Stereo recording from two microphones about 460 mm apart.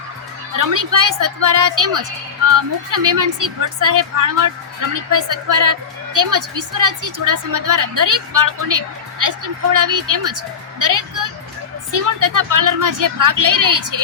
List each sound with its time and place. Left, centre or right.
0.9 s a woman's voice: right